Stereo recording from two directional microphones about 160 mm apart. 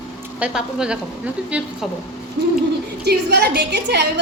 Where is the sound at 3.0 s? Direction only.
90° right.